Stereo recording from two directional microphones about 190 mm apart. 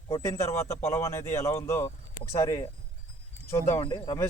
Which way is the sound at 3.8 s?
25° left (ahead or behind).